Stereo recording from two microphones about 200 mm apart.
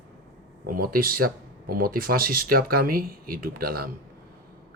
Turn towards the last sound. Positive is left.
turn(degrees=-50)  # may be behind; listen again after turning